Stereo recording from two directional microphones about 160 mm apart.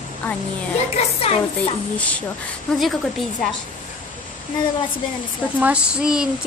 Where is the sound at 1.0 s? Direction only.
40° left (ahead or behind).